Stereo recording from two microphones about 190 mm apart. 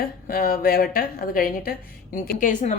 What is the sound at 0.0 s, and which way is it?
Speech, 50° left (ahead or behind).